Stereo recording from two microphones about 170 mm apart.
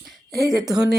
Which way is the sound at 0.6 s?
20° right (ahead or behind).